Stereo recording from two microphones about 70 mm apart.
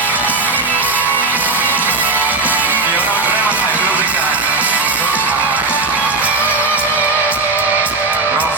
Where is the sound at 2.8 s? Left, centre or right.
Left.